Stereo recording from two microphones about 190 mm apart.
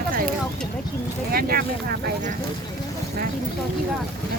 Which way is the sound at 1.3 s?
50° right (ahead or behind).